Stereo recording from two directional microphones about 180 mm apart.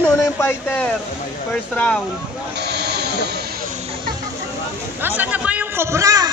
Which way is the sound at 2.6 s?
65° right (ahead or behind).